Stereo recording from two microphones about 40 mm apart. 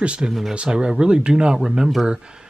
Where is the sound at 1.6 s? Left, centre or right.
Centre.